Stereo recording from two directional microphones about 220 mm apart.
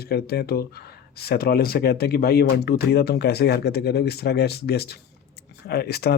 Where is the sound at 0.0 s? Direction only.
45° left (ahead or behind).